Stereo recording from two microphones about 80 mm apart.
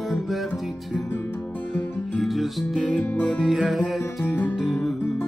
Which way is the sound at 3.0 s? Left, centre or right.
Centre.